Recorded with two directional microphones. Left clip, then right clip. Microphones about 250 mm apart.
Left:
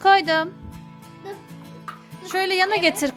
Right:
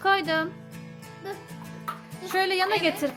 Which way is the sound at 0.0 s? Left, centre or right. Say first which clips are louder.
Left 7 dB; centre.